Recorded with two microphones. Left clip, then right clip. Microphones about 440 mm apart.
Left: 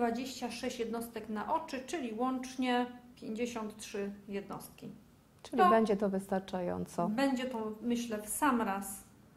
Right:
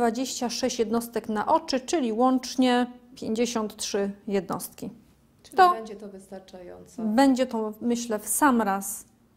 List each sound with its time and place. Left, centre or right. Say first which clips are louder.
0.0 s a woman's voice: right 9 dB; right
5.8 s a woman's voice: left 8 dB; left
7.2 s a woman's voice: right 15 dB; right